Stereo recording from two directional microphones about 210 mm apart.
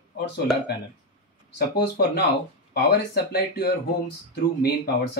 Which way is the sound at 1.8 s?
50° left (ahead or behind).